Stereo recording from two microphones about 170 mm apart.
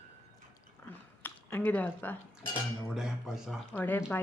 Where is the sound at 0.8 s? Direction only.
10° left (ahead or behind).